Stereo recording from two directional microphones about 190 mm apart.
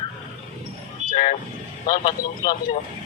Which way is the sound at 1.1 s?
45° left (ahead or behind).